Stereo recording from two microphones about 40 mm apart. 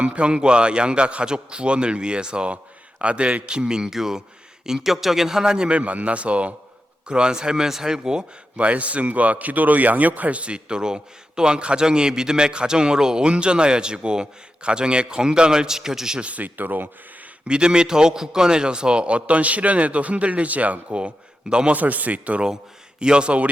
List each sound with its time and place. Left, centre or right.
0.0 s a man's voice: right
5.7 s a man's voice: right
7.1 s a man's voice: right
8.5 s speech: right; by 16.2 s centre
16.2 s speech: right
17.5 s a man's voice: right
23.0 s speech: right